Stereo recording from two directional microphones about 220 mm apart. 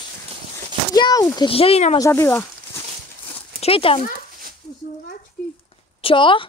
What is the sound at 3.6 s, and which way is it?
Speech, 25° left (ahead or behind).